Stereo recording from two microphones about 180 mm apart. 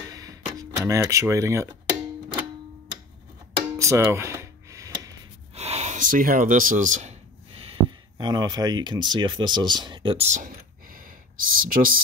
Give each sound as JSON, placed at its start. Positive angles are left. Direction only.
{"t": 0.1, "sound": "a sound", "side_deg": -20}
{"t": 3.7, "sound": "music", "side_deg": -15}
{"t": 5.5, "sound": "speech", "side_deg": -35}